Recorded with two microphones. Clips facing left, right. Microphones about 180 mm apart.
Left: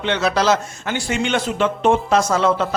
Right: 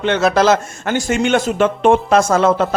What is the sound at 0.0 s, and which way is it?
Speech, 50° right (ahead or behind).